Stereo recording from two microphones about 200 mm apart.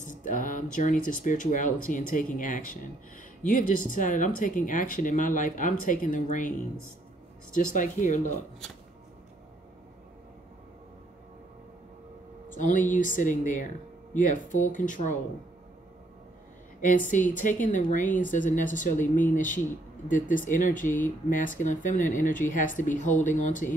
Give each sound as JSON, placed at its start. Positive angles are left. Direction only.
{"t": 0.0, "sound": "speech", "side_deg": 40}
{"t": 7.5, "sound": "speech", "side_deg": 40}
{"t": 12.5, "sound": "speech", "side_deg": 40}
{"t": 16.8, "sound": "speech", "side_deg": 40}